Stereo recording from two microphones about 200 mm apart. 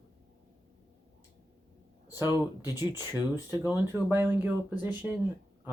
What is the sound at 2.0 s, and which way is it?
Speech, 20° left (ahead or behind).